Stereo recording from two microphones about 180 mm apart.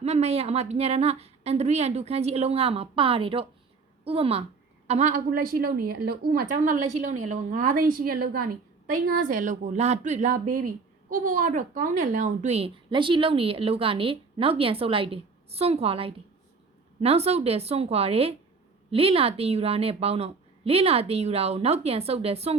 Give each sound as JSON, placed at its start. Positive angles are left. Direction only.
{"t": 0.0, "sound": "a woman's voice", "side_deg": -35}
{"t": 8.9, "sound": "a woman's voice", "side_deg": -45}